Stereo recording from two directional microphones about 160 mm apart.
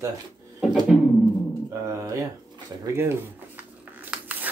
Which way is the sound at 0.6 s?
5° right (ahead or behind).